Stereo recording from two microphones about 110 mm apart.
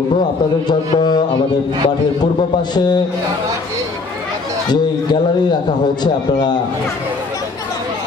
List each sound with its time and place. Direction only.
0.7 s speech: 40° left (ahead or behind)